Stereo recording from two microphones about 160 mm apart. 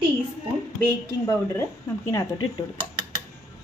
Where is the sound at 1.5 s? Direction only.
20° left (ahead or behind).